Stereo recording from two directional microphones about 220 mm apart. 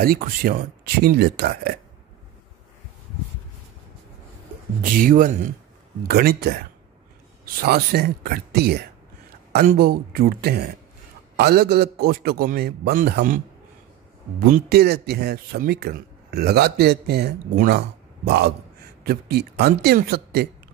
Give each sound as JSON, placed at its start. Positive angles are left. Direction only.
{"t": 0.0, "sound": "speech", "side_deg": -45}
{"t": 5.0, "sound": "speech", "side_deg": -40}
{"t": 7.6, "sound": "speech", "side_deg": -45}
{"t": 14.4, "sound": "speech", "side_deg": -45}